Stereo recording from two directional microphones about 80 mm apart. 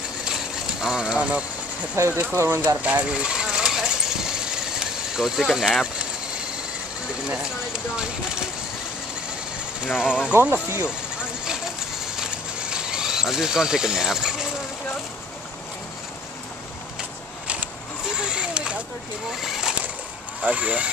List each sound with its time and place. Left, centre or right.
0.2 s a sound: centre
2.0 s speech: right
2.8 s coin: centre
7.2 s speech: centre
10.0 s speech: left
10.3 s speech: right
12.2 s a sound: centre
18.0 s vehicle: centre
19.3 s speech: centre
20.4 s speech: centre